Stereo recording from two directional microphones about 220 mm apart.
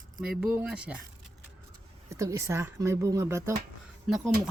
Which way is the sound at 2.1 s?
15° right (ahead or behind).